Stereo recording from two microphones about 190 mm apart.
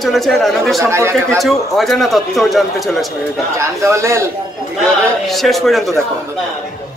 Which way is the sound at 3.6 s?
15° right (ahead or behind).